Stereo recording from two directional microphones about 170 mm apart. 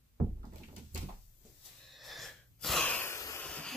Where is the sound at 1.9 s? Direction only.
Centre (ahead or behind); by 3.5 s 15° left (ahead or behind).